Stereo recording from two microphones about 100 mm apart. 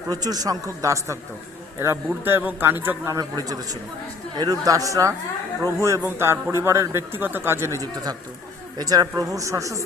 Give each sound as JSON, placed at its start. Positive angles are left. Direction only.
{"t": 0.1, "sound": "a man's voice", "side_deg": -40}
{"t": 2.2, "sound": "speech", "side_deg": -20}
{"t": 3.1, "sound": "a man's voice", "side_deg": -40}